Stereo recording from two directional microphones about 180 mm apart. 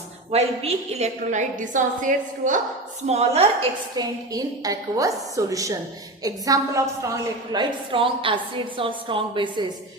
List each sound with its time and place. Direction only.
0.3 s a woman's voice: 35° right (ahead or behind)
3.9 s a woman's voice: 20° right (ahead or behind)